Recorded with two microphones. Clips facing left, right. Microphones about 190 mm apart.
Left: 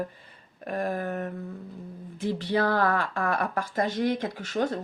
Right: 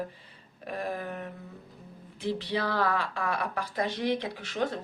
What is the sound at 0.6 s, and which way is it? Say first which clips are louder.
Speech: left 5 dB; 50° left (ahead or behind).